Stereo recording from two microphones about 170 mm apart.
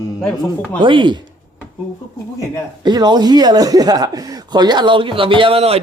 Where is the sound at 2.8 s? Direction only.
25° right (ahead or behind).